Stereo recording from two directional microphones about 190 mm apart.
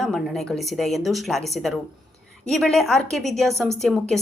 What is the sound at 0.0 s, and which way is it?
Speech, centre (ahead or behind).